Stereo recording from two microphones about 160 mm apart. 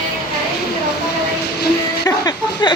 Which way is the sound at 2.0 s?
25° left (ahead or behind).